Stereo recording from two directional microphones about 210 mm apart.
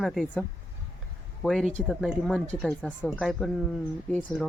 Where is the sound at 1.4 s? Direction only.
Centre (ahead or behind).